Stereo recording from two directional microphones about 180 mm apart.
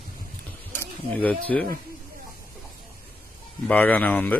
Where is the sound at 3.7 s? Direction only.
10° left (ahead or behind).